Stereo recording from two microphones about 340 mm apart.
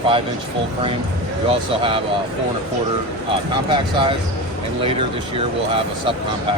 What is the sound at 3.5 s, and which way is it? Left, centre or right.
Speech, centre.